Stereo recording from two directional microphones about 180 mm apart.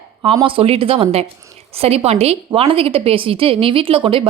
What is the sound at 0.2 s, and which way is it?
A woman's voice, 25° right (ahead or behind).